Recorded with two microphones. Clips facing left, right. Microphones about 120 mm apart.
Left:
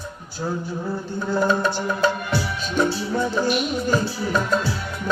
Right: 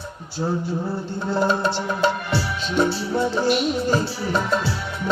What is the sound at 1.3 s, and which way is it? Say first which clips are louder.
Music: even; 25° right (ahead or behind).